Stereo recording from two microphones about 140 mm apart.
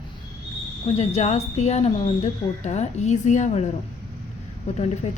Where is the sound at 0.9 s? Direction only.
50° left (ahead or behind).